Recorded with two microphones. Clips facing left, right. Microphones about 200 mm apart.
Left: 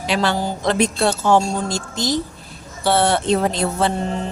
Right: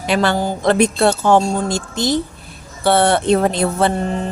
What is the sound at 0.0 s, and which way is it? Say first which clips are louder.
Speech: right 3 dB; 55° right (ahead or behind).